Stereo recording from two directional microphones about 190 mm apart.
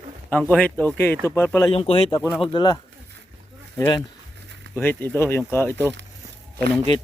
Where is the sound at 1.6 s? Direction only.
30° left (ahead or behind).